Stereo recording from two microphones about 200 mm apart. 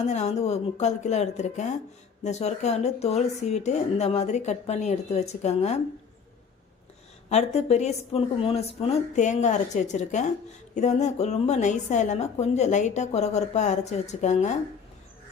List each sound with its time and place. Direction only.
0.0 s a woman's voice: 35° left (ahead or behind)
7.3 s a woman's voice: 35° left (ahead or behind)